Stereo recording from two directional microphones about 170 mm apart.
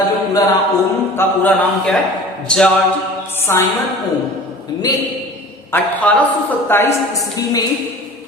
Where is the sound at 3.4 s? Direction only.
15° left (ahead or behind).